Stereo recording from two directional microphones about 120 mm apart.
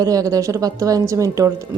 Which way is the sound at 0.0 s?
30° right (ahead or behind).